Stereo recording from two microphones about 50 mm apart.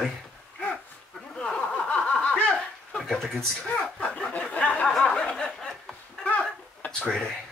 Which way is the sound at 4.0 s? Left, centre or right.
Left.